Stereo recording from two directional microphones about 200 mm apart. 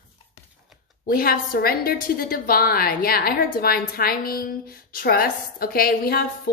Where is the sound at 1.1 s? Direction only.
50° left (ahead or behind).